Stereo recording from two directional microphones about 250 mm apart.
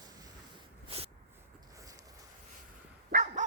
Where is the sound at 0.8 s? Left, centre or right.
Right.